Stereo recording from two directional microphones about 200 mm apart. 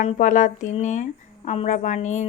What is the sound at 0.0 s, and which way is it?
Speech, 40° left (ahead or behind).